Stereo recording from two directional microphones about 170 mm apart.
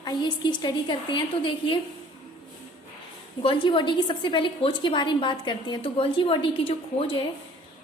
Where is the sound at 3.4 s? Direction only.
30° left (ahead or behind).